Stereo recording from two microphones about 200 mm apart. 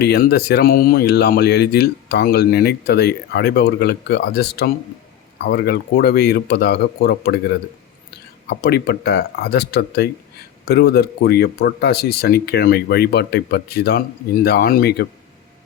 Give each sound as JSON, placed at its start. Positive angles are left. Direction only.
{"t": 0.0, "sound": "speech", "side_deg": 55}